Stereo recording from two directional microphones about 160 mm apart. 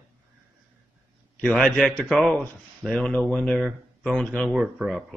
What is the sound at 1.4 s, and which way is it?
A man's voice, 5° left (ahead or behind).